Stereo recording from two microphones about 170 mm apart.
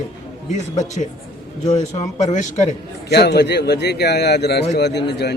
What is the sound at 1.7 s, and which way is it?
Speech, 45° left (ahead or behind).